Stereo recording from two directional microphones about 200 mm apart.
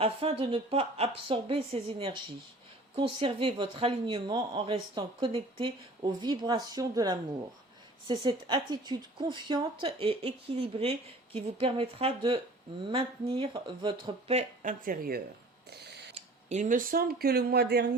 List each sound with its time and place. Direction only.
0.0 s a woman's voice: 30° right (ahead or behind); by 17.8 s 55° right (ahead or behind)